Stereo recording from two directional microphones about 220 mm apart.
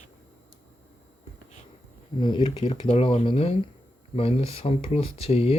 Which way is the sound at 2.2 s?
20° left (ahead or behind).